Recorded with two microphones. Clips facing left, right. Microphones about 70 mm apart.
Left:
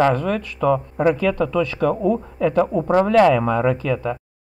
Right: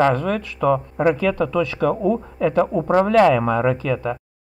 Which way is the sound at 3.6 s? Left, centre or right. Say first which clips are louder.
Even; right.